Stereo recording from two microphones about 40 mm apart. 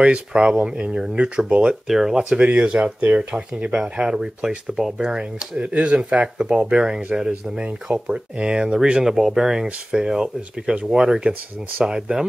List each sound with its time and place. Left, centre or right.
0.0 s speech: right
1.9 s speech: centre
2.1 s speech: right
5.6 s speech: right
9.0 s speech: centre